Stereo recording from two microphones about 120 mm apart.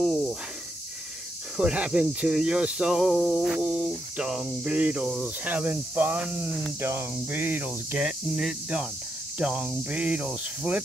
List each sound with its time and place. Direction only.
0.0 s snake: centre (ahead or behind)
1.6 s speech: 5° right (ahead or behind)